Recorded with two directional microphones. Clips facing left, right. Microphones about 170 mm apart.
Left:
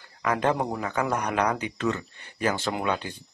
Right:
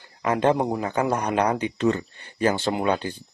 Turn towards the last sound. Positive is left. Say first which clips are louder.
# right 4 dB
turn(degrees=-30)  # may be behind; listen again after turning